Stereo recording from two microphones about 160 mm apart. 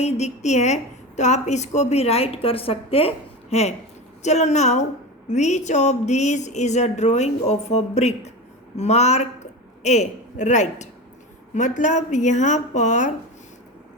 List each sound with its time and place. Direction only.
0.0 s a woman's voice: 45° left (ahead or behind)